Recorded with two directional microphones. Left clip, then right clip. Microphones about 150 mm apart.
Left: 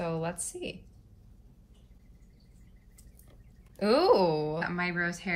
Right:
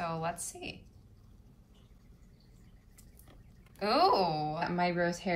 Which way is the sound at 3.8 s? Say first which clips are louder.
Left 3 dB; 40° right (ahead or behind).